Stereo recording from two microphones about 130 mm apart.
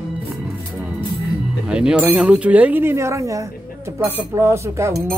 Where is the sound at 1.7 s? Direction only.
5° right (ahead or behind).